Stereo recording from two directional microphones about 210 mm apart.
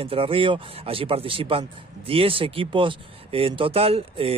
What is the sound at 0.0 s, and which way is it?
Speech, 25° right (ahead or behind).